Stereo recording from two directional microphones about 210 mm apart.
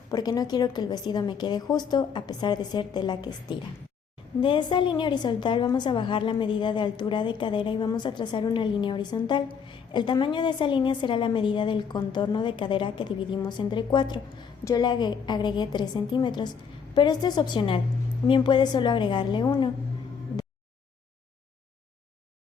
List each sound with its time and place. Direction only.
0.1 s a woman's voice: 20° left (ahead or behind)